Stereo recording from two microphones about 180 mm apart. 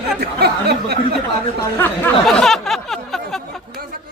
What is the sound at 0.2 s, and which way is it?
Speech, 60° right (ahead or behind).